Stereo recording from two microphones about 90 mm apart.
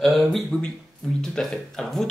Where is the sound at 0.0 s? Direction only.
Centre (ahead or behind).